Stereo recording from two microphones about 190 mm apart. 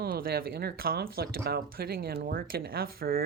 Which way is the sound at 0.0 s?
50° right (ahead or behind).